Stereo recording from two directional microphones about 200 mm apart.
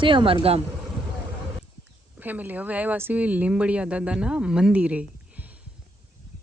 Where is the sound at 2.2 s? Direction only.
10° right (ahead or behind).